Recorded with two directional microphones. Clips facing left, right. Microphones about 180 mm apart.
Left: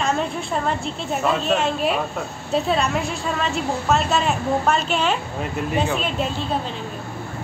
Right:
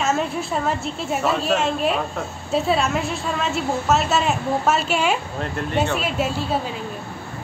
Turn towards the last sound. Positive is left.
turn(degrees=-5)  # may be behind; listen again after turning